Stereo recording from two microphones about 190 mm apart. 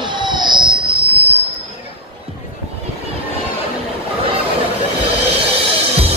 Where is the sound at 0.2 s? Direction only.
25° right (ahead or behind).